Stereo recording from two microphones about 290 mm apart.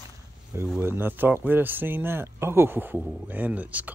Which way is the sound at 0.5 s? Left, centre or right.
Centre.